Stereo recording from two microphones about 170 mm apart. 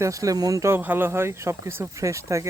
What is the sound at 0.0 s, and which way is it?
Speech, 20° right (ahead or behind).